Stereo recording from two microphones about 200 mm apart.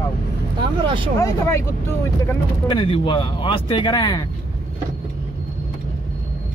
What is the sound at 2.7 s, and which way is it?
Speech, 25° left (ahead or behind).